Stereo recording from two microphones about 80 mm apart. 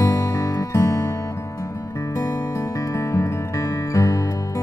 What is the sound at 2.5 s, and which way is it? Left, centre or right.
Music, left.